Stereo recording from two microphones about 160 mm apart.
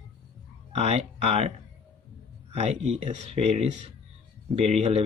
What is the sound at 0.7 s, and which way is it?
Speech, 40° right (ahead or behind).